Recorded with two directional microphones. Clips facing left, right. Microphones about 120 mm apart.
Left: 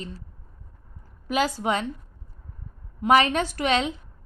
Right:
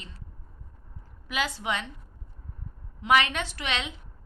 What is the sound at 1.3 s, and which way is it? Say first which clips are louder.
Speech: left 6 dB; 40° left (ahead or behind).